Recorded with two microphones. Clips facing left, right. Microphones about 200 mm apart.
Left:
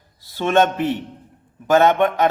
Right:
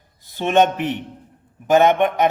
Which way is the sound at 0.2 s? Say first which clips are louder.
Even; 15° right (ahead or behind).